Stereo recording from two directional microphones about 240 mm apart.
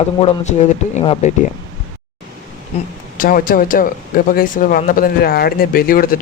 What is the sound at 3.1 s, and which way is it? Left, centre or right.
A man's voice, left.